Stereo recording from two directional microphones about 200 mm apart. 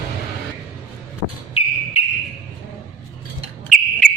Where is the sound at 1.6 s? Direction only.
30° left (ahead or behind).